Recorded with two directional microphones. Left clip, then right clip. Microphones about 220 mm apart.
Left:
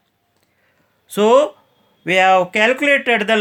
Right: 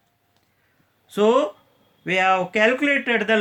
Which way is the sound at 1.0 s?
45° left (ahead or behind).